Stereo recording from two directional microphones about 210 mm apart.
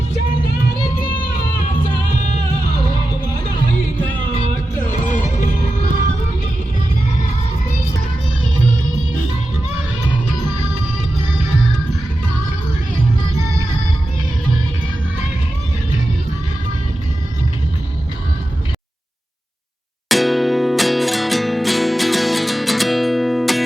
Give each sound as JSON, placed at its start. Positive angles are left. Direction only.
{"t": 2.1, "sound": "music", "side_deg": 35}
{"t": 20.1, "sound": "music", "side_deg": 0}